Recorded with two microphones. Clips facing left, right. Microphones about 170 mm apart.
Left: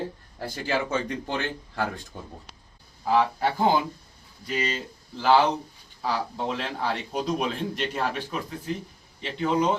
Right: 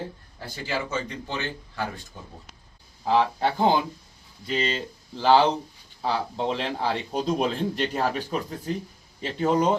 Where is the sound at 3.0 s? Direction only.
25° right (ahead or behind).